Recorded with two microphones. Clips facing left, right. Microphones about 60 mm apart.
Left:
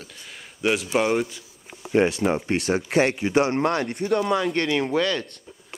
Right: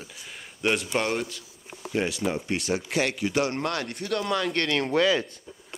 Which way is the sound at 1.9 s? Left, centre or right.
Left.